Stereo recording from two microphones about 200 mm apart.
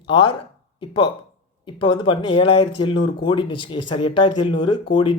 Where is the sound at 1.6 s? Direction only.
25° left (ahead or behind).